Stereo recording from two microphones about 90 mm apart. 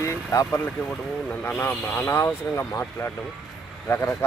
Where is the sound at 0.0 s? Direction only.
30° left (ahead or behind).